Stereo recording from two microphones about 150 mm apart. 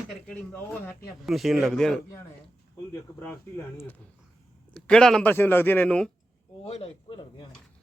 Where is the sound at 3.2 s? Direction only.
15° left (ahead or behind).